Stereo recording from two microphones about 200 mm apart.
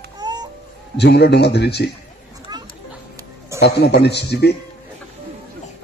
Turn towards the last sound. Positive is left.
turn(degrees=55)  # may be behind; listen again after turning